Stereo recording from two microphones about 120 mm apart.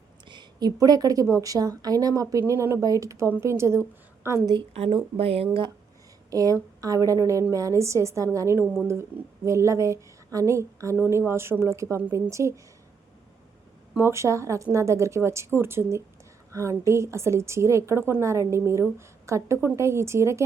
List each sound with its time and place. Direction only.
0.3 s a woman's voice: 35° right (ahead or behind); by 4.4 s 20° right (ahead or behind)
4.7 s speech: 55° right (ahead or behind)
6.3 s a woman's voice: 30° right (ahead or behind)
13.9 s a woman's voice: 20° right (ahead or behind)